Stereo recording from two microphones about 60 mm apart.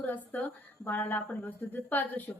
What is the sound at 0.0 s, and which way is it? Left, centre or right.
A woman's voice, left.